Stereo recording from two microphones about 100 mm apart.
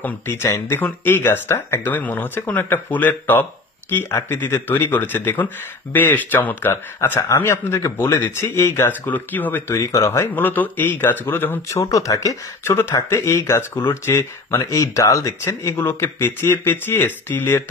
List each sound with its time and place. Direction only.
0.0 s speech: 25° left (ahead or behind)
9.8 s speech: 30° left (ahead or behind)
11.7 s speech: 35° left (ahead or behind)